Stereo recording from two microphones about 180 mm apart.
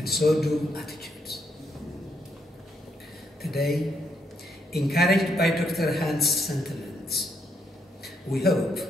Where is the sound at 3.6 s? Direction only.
Centre (ahead or behind).